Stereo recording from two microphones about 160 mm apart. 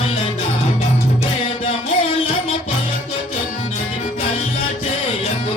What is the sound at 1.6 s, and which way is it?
Music, 35° left (ahead or behind).